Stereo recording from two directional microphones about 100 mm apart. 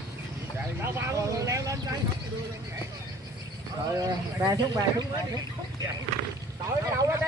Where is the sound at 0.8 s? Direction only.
30° right (ahead or behind).